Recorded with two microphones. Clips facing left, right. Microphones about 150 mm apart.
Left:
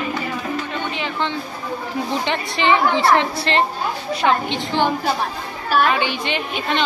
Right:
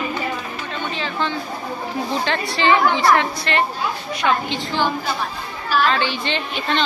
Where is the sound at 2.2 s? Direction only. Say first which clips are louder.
Right 2 dB; 20° left (ahead or behind).